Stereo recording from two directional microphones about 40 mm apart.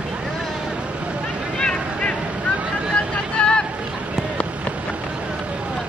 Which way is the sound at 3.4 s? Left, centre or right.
Left.